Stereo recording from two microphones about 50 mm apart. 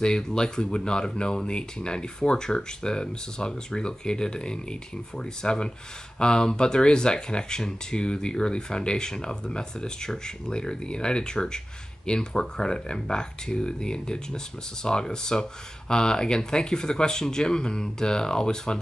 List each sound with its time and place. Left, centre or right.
0.0 s speech: centre